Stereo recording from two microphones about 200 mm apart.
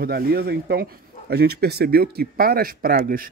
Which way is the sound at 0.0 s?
50° right (ahead or behind).